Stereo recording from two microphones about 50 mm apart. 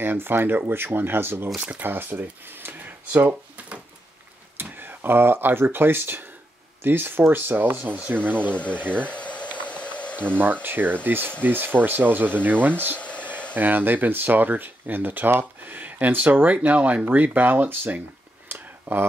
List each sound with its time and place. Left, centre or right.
0.0 s speech: right
4.6 s speech: right
8.5 s speech: left
8.9 s boiling: left
10.2 s speech: right
12.9 s a sound: left
13.6 s speech: right
18.5 s a sound: right